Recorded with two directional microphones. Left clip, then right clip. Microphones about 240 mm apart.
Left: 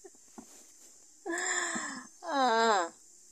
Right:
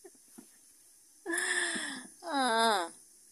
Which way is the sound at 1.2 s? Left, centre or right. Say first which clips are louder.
Right 1 dB; right.